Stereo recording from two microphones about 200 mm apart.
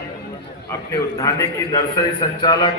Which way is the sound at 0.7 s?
15° left (ahead or behind).